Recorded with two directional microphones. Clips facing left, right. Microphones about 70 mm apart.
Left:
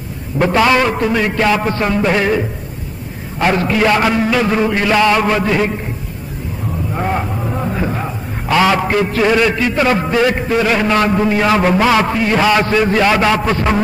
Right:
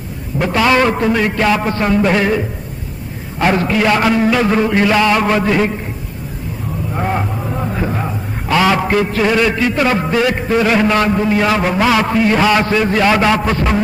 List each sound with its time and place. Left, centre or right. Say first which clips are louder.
0.4 s a man's voice: left 3 dB; centre
0.7 s music: right 1 dB; centre
3.3 s music: even; centre
3.9 s a man's voice: even; centre
4.2 s music: right 1 dB; centre
6.9 s a man's voice: even; centre
9.8 s music: left 1 dB; centre